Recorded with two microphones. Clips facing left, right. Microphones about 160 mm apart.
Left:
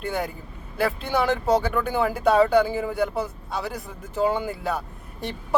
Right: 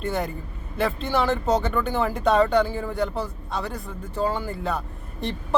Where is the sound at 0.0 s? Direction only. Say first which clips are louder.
Right 1 dB; 5° left (ahead or behind).